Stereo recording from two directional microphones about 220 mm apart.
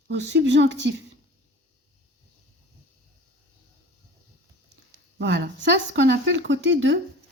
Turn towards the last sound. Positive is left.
turn(degrees=-55)  # may be behind; listen again after turning